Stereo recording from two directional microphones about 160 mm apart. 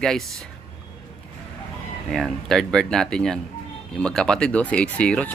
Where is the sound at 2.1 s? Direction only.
5° left (ahead or behind).